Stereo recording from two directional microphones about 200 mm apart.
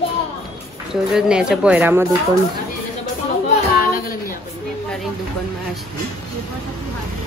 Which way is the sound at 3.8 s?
45° left (ahead or behind).